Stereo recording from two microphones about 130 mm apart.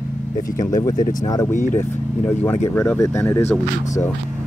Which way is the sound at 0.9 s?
90° left.